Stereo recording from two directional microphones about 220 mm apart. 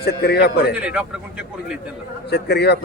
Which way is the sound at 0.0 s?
45° left (ahead or behind).